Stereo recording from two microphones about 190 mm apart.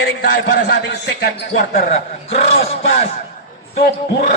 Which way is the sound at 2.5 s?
30° left (ahead or behind).